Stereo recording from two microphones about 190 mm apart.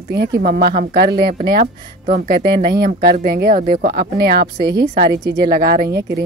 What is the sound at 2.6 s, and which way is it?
A woman's voice, 55° right (ahead or behind).